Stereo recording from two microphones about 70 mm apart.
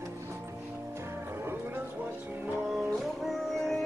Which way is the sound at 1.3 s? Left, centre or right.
Right.